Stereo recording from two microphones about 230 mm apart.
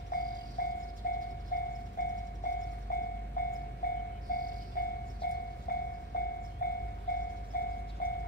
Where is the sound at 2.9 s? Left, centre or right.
Left.